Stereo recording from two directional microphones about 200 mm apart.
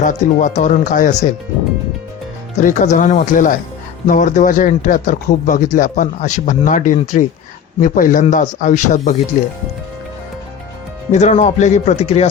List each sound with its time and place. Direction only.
0.0 s speech: 40° left (ahead or behind)
2.6 s speech: 40° left (ahead or behind)
11.1 s speech: 35° left (ahead or behind)